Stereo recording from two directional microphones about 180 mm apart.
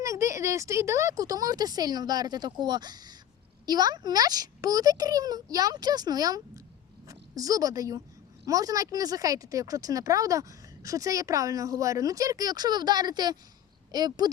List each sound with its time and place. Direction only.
0.0 s a child's voice: 15° right (ahead or behind)